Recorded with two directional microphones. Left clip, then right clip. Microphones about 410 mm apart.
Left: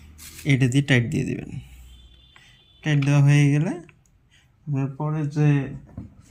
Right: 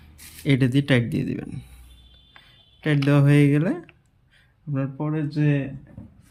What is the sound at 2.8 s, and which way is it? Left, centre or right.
Speech, centre.